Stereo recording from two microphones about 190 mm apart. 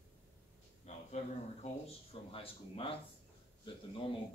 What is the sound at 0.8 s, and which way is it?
A man's voice, 35° left (ahead or behind).